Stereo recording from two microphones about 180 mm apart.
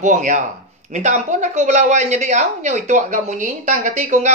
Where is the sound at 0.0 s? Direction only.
45° right (ahead or behind).